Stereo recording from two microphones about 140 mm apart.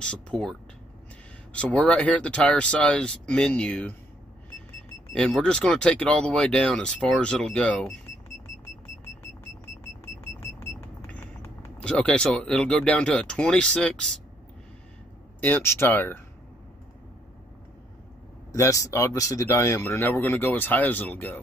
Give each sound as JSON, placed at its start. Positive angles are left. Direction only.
{"t": 0.0, "sound": "speech", "side_deg": 5}
{"t": 5.1, "sound": "speech", "side_deg": 5}
{"t": 10.6, "sound": "speech", "side_deg": 15}
{"t": 15.4, "sound": "speech", "side_deg": 15}
{"t": 18.5, "sound": "speech", "side_deg": 25}